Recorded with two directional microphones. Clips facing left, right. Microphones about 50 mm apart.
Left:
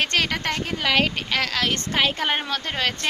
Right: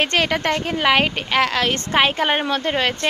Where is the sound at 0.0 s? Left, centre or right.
Right.